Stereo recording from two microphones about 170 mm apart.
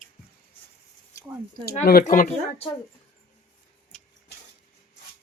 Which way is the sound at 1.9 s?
55° left (ahead or behind).